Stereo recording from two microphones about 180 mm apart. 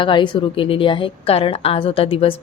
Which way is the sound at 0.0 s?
25° left (ahead or behind).